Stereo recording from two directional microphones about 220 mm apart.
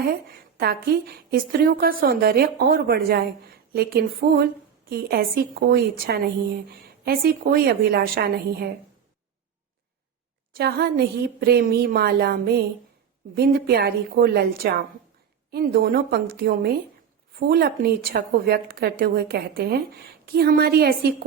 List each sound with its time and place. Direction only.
0.5 s a woman's voice: 45° right (ahead or behind)
10.6 s a woman's voice: 45° right (ahead or behind)